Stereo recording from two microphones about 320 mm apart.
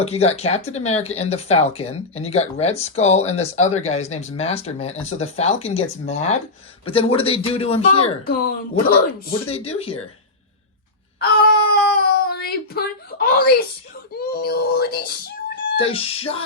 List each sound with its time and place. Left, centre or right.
0.0 s speech: centre
9.5 s speech: centre
11.2 s a sound: left
14.1 s speech: left
15.8 s speech: centre